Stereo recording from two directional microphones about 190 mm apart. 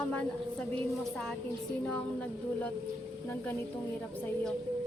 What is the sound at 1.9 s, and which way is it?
Speech, 10° left (ahead or behind).